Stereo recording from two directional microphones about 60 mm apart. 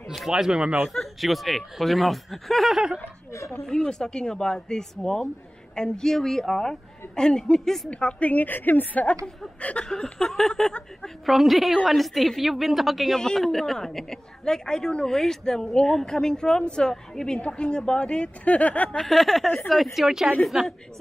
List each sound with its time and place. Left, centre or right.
0.1 s speech: centre
0.8 s speech: centre
3.6 s speech: centre
7.9 s a woman's voice: centre
9.1 s speech: centre
9.6 s a sound: left
9.8 s speech: centre
18.9 s speech: centre